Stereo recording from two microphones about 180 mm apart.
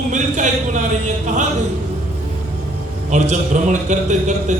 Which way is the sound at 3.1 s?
45° right (ahead or behind).